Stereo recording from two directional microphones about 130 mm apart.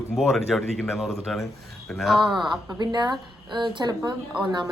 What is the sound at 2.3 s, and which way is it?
A woman's voice, 35° right (ahead or behind).